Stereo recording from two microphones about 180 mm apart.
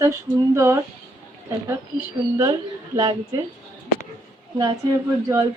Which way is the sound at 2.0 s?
20° right (ahead or behind).